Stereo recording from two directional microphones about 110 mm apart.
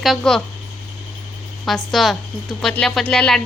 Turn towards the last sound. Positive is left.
turn(degrees=10)  # may be behind; listen again after turning